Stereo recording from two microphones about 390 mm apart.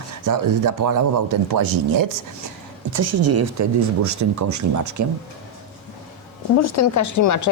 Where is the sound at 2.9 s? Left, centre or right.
Right.